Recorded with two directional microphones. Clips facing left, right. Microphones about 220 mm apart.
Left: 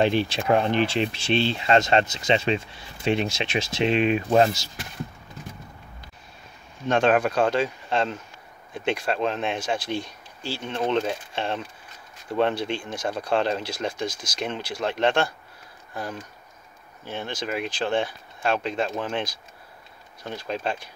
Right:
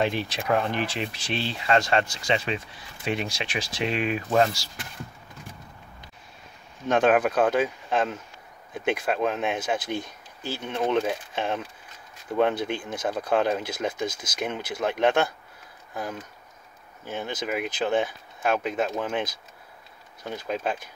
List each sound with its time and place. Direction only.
0.0 s speech: 30° left (ahead or behind)
6.9 s speech: 5° right (ahead or behind)
10.4 s speech: 20° right (ahead or behind)
10.7 s speech: 10° right (ahead or behind)
20.2 s speech: 10° right (ahead or behind)